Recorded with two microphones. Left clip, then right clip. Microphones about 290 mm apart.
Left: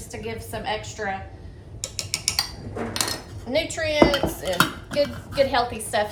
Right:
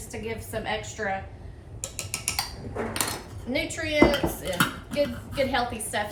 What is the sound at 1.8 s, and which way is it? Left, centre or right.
Mechanisms, centre.